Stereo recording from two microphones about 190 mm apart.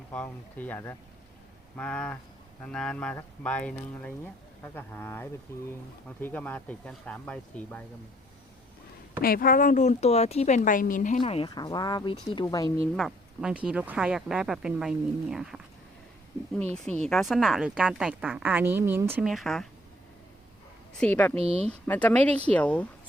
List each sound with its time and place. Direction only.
0.1 s speech: 10° left (ahead or behind)
9.2 s speech: 50° left (ahead or behind)
11.2 s speech: 30° left (ahead or behind)
13.0 s a woman's voice: centre (ahead or behind)
16.7 s a woman's voice: 5° left (ahead or behind)
21.0 s speech: 10° left (ahead or behind)
21.3 s speech: 35° right (ahead or behind)
21.7 s speech: 5° left (ahead or behind)